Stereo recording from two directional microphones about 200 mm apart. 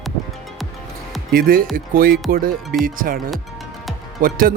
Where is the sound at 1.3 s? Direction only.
45° right (ahead or behind).